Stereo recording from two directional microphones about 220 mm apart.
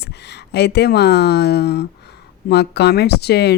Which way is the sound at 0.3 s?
50° left (ahead or behind).